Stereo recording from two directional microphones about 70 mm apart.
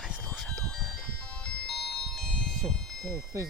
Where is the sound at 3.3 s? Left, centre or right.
Right.